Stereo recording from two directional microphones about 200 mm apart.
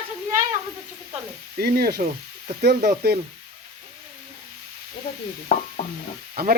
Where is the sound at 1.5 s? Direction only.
50° right (ahead or behind).